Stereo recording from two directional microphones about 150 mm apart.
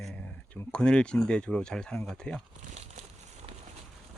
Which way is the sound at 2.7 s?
50° right (ahead or behind).